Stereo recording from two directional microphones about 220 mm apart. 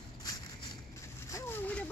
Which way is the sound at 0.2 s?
15° left (ahead or behind).